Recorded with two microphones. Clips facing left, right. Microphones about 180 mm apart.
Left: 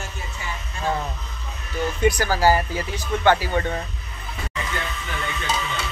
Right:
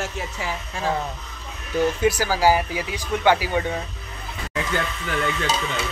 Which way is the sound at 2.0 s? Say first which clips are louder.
Even; 5° right (ahead or behind).